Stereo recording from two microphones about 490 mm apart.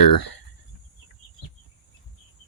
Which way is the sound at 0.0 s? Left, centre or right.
Left.